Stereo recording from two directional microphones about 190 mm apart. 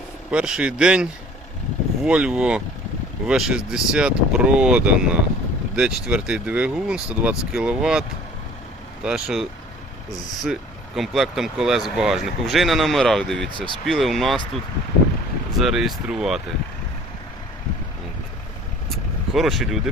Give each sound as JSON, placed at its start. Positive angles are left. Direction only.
{"t": 0.3, "sound": "speech", "side_deg": -5}
{"t": 2.0, "sound": "speech", "side_deg": -5}
{"t": 9.0, "sound": "speech", "side_deg": -5}
{"t": 13.5, "sound": "speech", "side_deg": -25}
{"t": 13.8, "sound": "speech", "side_deg": 0}
{"t": 15.5, "sound": "speech", "side_deg": 0}
{"t": 18.9, "sound": "vehicle", "side_deg": 0}